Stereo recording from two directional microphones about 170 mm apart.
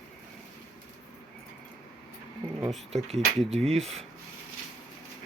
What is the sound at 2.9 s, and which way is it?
Speech, 40° right (ahead or behind).